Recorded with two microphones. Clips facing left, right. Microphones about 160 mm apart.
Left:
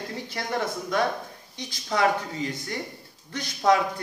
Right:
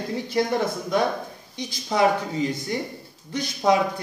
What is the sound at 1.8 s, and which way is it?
A man's voice, 20° right (ahead or behind).